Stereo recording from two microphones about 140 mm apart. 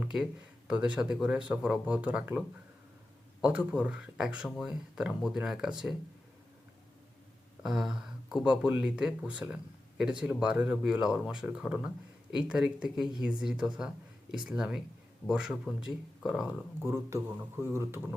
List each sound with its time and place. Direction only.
0.0 s speech: 5° right (ahead or behind)
3.4 s speech: 10° right (ahead or behind)
7.6 s speech: 5° right (ahead or behind)